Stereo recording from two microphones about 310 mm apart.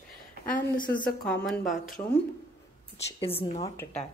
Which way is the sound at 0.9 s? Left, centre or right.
Left.